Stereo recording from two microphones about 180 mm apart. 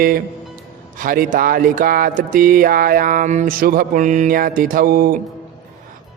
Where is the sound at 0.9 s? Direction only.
50° right (ahead or behind).